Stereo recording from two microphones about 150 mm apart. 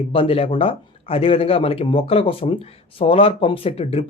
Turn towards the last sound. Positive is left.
turn(degrees=40)  # may be behind; listen again after turning